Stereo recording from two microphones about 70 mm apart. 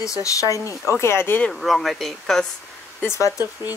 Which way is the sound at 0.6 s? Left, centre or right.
Right.